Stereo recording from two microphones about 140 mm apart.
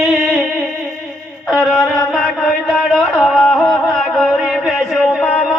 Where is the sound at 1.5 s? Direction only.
Centre (ahead or behind).